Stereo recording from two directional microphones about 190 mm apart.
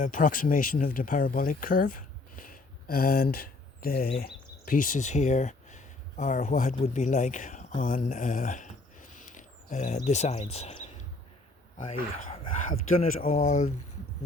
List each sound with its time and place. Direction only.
0.0 s speech: 40° left (ahead or behind)